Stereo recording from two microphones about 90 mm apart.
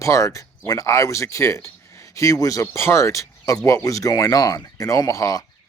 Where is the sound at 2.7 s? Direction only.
30° left (ahead or behind).